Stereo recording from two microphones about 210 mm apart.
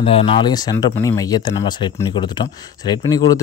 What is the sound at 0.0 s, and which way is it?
Speech, 30° left (ahead or behind).